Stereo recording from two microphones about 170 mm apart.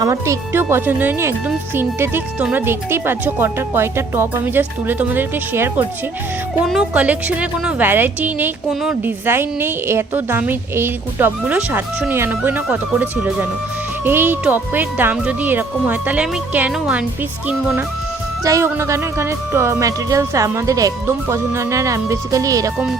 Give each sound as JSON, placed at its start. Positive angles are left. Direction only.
{"t": 0.0, "sound": "a woman's voice", "side_deg": -15}
{"t": 18.4, "sound": "a woman's voice", "side_deg": -15}